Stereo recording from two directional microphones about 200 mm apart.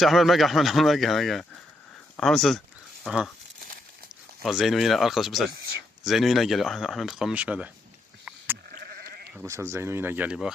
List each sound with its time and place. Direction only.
0.0 s speech: centre (ahead or behind)
4.4 s speech: centre (ahead or behind)
8.7 s goat: 50° right (ahead or behind)
9.3 s speech: 10° right (ahead or behind)